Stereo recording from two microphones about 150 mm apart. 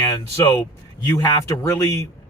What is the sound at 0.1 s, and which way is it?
A man's voice, 20° left (ahead or behind).